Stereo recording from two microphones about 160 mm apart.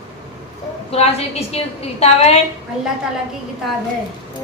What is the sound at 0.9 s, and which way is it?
A woman's voice, 40° left (ahead or behind).